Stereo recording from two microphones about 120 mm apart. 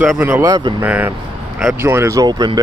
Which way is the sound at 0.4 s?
35° right (ahead or behind).